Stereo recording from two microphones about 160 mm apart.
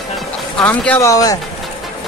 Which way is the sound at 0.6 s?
10° left (ahead or behind).